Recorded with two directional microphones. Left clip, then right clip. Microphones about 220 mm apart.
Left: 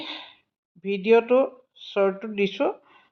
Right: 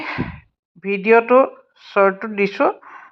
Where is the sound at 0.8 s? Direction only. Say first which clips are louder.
Right 5 dB; 55° right (ahead or behind).